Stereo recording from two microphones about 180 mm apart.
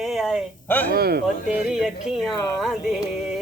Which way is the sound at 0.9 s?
60° right (ahead or behind).